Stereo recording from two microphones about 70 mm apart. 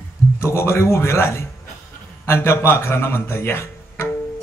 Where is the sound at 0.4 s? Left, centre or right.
Left.